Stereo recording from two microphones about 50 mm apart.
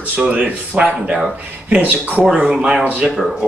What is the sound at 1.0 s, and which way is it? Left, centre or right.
Speech, centre.